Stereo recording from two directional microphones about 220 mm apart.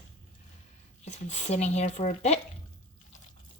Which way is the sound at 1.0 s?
30° left (ahead or behind).